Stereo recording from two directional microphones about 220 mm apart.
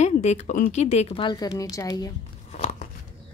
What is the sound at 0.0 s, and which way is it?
Speech, 30° left (ahead or behind).